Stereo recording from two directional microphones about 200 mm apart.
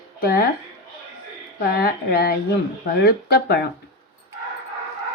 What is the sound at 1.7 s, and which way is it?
Speech, 50° left (ahead or behind).